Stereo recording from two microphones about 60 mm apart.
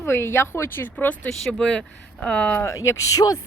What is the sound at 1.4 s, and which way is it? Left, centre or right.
Speech, centre.